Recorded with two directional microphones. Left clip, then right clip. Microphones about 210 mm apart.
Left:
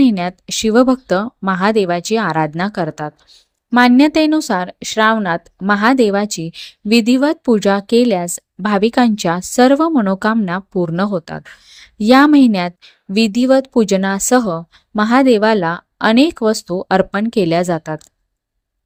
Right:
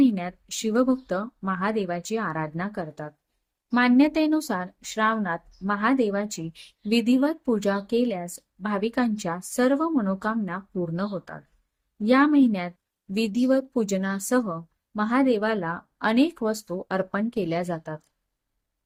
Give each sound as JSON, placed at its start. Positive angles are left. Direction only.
{"t": 0.0, "sound": "speech", "side_deg": 40}